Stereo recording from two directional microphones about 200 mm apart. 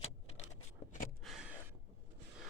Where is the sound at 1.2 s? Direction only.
Centre (ahead or behind).